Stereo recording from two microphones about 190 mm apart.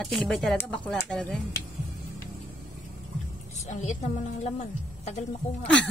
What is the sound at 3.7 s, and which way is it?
Speech, 40° left (ahead or behind).